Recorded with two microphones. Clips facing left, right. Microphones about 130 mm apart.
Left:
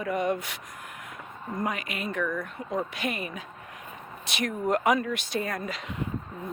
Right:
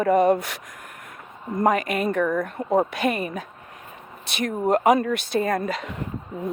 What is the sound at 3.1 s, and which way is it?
Speech, 40° right (ahead or behind).